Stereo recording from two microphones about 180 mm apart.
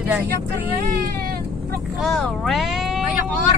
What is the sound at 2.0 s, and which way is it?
Speech, centre (ahead or behind).